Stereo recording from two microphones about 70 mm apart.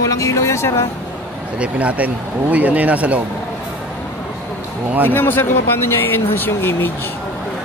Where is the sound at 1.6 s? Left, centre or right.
Right.